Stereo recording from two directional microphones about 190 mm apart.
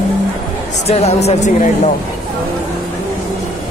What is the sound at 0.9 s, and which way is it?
A man's voice, 35° left (ahead or behind).